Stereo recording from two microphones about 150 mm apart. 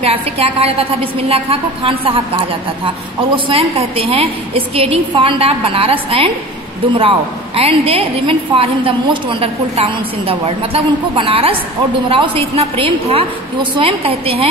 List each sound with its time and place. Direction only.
0.0 s a woman's voice: 40° right (ahead or behind)